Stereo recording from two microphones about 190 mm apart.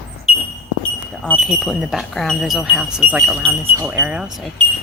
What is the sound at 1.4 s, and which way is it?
Speech, centre (ahead or behind).